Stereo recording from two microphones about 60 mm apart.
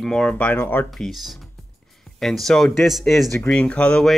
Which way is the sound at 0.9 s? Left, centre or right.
Centre.